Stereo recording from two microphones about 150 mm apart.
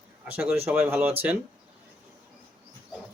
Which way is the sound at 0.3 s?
10° right (ahead or behind).